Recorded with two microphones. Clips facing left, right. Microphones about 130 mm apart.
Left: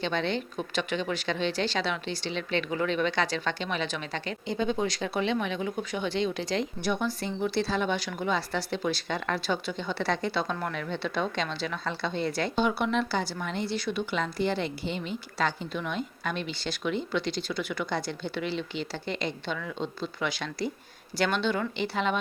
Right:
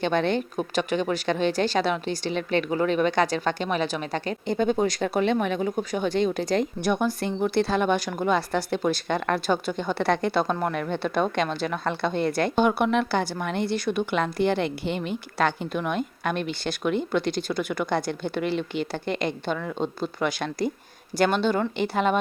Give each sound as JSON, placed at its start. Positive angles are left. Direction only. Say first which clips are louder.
{"t": 0.0, "sound": "a woman's voice", "louder": "right 6 dB", "side_deg": -50}